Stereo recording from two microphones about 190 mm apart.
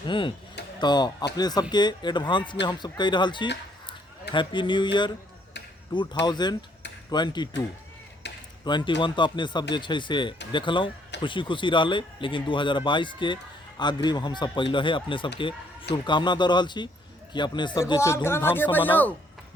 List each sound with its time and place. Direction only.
0.1 s speech: 25° left (ahead or behind)
8.2 s a sound: 65° left (ahead or behind)
8.6 s speech: 25° left (ahead or behind)